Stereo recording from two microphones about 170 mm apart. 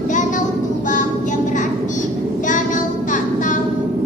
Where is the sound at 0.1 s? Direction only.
50° left (ahead or behind).